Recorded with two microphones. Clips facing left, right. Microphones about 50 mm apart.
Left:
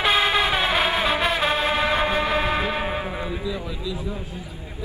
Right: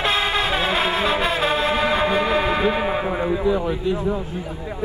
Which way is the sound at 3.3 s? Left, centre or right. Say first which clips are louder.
Right 9 dB; right.